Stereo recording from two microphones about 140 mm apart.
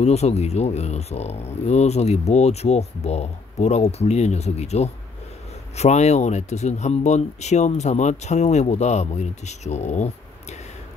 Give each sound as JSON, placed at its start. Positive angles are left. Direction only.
{"t": 0.0, "sound": "speech", "side_deg": 50}